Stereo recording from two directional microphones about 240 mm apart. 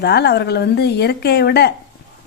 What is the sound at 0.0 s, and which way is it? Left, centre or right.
A woman's voice, left.